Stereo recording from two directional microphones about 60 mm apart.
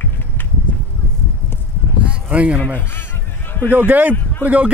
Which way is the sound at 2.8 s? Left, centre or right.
Left.